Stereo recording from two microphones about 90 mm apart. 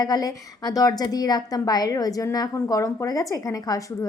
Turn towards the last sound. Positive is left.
turn(degrees=40)  # may be behind; listen again after turning